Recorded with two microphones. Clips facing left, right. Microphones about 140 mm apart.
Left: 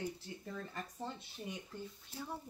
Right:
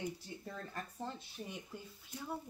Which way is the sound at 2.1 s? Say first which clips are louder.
Even; 30° left (ahead or behind).